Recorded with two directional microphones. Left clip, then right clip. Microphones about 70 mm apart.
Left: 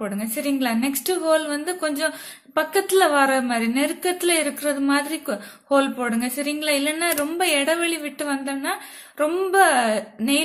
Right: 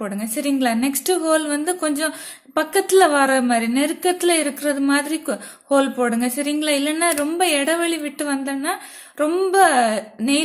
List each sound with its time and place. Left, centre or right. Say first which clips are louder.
0.1 s a woman's voice: right 2 dB; right